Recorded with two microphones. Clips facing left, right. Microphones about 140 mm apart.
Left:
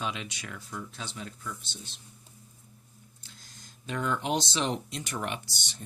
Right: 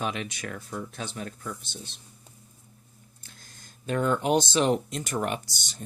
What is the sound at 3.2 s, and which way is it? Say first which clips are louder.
Speech: right 2 dB; 50° right (ahead or behind).